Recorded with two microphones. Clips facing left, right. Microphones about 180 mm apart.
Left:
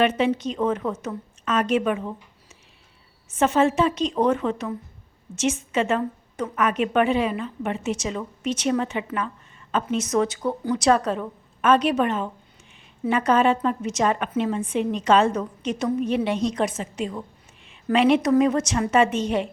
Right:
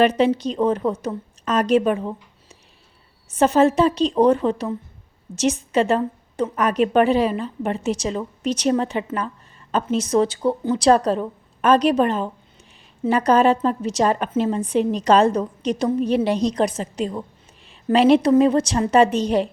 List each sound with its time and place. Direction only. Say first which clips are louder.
0.0 s a woman's voice: right 4 dB; 35° right (ahead or behind)
3.2 s a woman's voice: right 4 dB; 35° right (ahead or behind)